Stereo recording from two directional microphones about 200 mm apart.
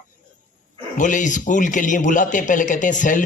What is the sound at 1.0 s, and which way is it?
A man's voice, 40° left (ahead or behind).